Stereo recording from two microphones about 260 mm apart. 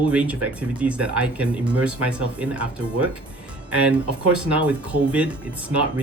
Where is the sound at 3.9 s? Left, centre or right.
Centre.